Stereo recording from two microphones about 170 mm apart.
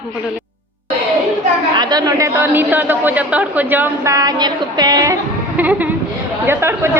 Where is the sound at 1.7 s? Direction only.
25° right (ahead or behind).